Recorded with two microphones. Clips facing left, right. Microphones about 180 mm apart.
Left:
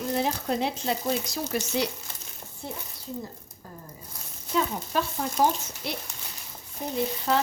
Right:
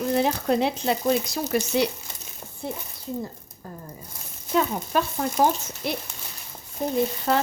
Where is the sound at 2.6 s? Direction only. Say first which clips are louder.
Right 5 dB; 60° right (ahead or behind).